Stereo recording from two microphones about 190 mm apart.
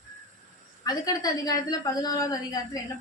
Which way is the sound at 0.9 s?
20° left (ahead or behind).